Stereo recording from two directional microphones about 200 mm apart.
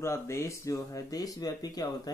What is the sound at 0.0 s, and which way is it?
Speech, 15° left (ahead or behind).